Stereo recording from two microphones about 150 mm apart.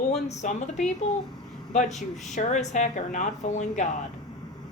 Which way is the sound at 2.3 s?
55° left (ahead or behind).